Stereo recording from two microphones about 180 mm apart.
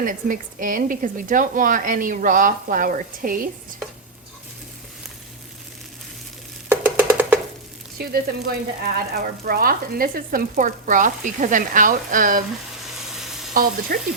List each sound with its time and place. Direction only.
0.0 s speech: 50° right (ahead or behind)
6.7 s a sound: 10° right (ahead or behind)
7.9 s speech: 55° right (ahead or behind)
13.0 s frying: centre (ahead or behind)
13.5 s speech: 55° right (ahead or behind)